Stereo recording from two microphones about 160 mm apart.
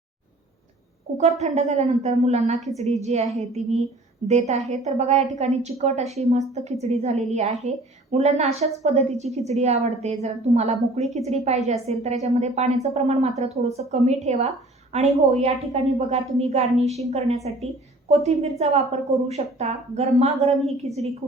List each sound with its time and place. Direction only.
1.2 s a woman's voice: 45° right (ahead or behind)